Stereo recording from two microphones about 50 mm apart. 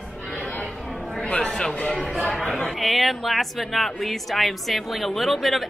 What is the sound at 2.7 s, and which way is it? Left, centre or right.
Speech, centre.